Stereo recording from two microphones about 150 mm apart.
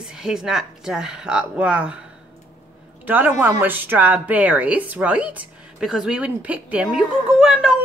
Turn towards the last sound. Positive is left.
turn(degrees=-5)  # may be behind; listen again after turning